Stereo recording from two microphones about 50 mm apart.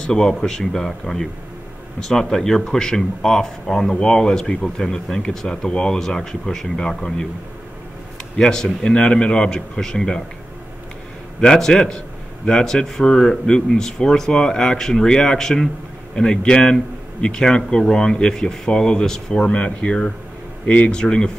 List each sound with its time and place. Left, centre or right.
0.0 s speech: centre
8.4 s speech: centre
11.4 s speech: centre